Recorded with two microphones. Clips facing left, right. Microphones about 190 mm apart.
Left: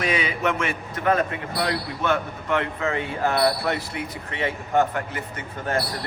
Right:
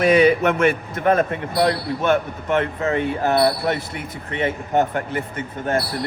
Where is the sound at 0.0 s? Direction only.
50° right (ahead or behind).